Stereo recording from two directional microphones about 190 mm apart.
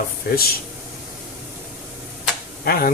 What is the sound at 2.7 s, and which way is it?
Speech, 50° left (ahead or behind).